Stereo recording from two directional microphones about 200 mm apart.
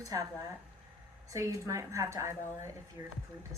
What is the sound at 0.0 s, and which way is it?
Speech, 15° right (ahead or behind).